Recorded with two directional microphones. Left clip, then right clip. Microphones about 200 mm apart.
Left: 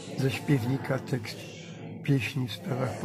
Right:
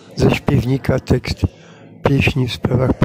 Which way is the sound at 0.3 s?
50° right (ahead or behind).